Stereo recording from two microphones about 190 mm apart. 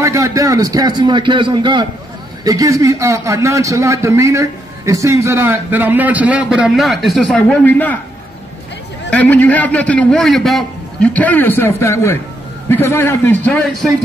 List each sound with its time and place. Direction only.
0.0 s a man's voice: 15° right (ahead or behind); by 8.0 s 10° left (ahead or behind)
9.1 s a man's voice: 5° left (ahead or behind)